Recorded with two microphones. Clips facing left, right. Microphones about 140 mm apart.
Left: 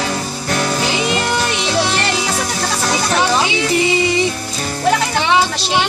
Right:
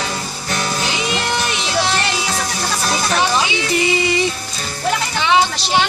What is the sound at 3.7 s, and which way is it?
Music, 20° left (ahead or behind).